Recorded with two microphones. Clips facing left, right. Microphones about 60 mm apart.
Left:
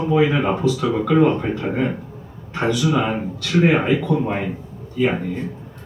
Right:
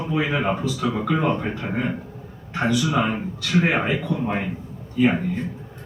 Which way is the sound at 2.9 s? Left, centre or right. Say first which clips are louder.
Left 2 dB; centre.